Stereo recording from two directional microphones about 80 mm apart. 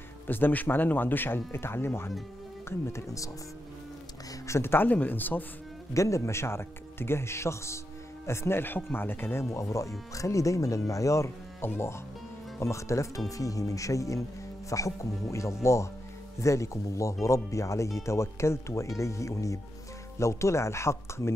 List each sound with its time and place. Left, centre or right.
0.3 s speech: left
4.5 s speech: left
5.9 s speech: left